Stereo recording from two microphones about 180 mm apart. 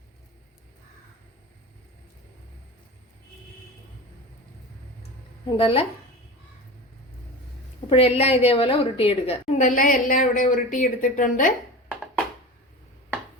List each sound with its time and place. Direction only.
5.5 s a woman's voice: 30° left (ahead or behind)
7.9 s a woman's voice: 35° left (ahead or behind)